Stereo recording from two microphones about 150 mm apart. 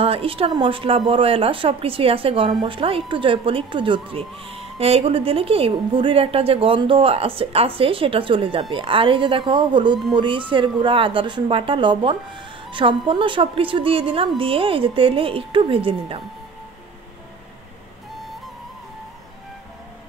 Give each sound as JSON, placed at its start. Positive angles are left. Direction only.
{"t": 0.0, "sound": "a woman's voice", "side_deg": -40}